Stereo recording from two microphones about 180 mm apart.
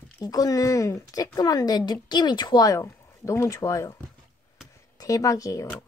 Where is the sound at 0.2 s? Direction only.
20° left (ahead or behind).